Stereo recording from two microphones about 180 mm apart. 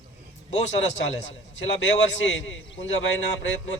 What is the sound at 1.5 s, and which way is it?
Speech, 90° left.